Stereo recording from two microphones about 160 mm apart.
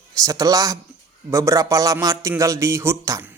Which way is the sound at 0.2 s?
20° right (ahead or behind).